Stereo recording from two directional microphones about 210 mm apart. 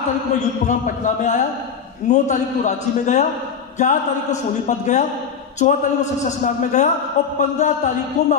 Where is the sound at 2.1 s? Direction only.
35° left (ahead or behind).